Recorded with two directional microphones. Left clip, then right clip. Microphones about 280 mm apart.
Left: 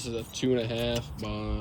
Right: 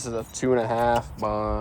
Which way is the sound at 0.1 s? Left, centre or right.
Right.